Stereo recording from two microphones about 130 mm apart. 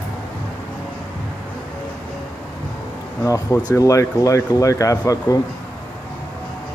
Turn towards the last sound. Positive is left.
turn(degrees=25)  # may be behind; listen again after turning